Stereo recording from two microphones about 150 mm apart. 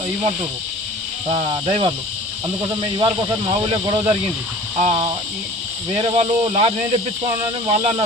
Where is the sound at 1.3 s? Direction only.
35° right (ahead or behind).